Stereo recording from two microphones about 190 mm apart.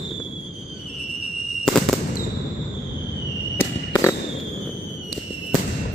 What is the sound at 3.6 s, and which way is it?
Fireworks, 15° left (ahead or behind).